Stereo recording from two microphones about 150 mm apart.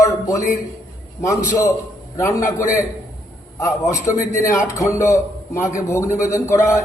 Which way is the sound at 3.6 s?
20° left (ahead or behind).